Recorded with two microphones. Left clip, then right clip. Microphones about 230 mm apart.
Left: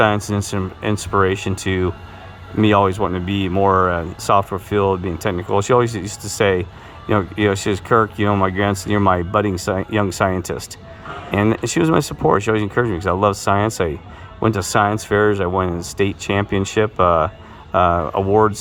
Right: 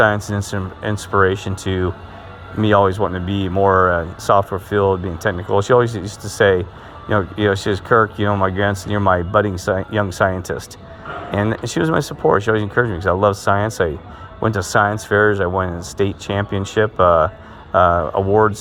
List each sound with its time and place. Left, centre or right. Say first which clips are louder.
0.0 s speech: right 1 dB; centre